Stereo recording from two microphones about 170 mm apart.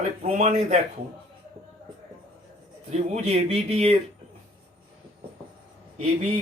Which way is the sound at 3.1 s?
40° right (ahead or behind).